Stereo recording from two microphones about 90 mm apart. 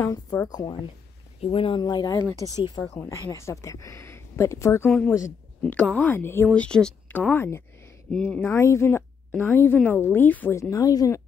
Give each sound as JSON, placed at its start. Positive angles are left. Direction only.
{"t": 0.0, "sound": "speech", "side_deg": 35}
{"t": 1.5, "sound": "speech", "side_deg": 90}
{"t": 1.8, "sound": "speech", "side_deg": 50}
{"t": 4.8, "sound": "a woman's voice", "side_deg": 10}
{"t": 6.5, "sound": "speech", "side_deg": 10}
{"t": 8.1, "sound": "speech", "side_deg": 15}
{"t": 10.5, "sound": "speech", "side_deg": 35}